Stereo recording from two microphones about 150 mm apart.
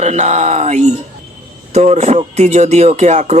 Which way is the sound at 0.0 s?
50° right (ahead or behind).